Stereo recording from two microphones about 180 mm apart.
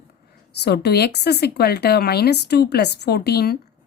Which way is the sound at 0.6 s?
65° left (ahead or behind).